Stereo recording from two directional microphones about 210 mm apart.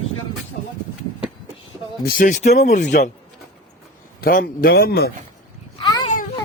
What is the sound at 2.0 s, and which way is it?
Speech, 40° left (ahead or behind).